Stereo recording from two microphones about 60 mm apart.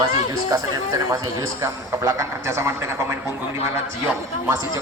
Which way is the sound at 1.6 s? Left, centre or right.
Right.